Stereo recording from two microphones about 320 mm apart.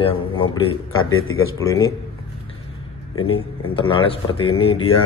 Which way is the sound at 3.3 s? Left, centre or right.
Centre.